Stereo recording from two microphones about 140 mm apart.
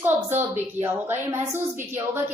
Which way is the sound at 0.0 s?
15° right (ahead or behind).